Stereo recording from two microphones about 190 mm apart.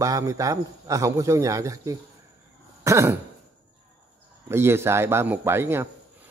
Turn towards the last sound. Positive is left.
turn(degrees=-15)  # may be behind; listen again after turning